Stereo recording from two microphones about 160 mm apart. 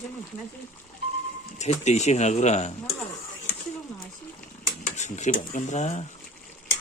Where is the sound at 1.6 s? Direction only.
45° left (ahead or behind).